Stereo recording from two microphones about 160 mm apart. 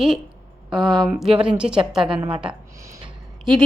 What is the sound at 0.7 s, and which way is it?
Speech, 30° right (ahead or behind).